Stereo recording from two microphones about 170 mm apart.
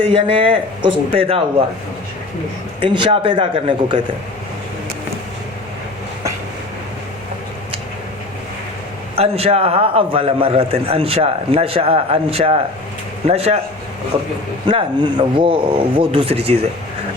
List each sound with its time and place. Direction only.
0.0 s a man's voice: 30° right (ahead or behind)
2.8 s speech: 30° right (ahead or behind)
9.1 s a man's voice: 35° right (ahead or behind)
14.7 s a man's voice: 30° right (ahead or behind)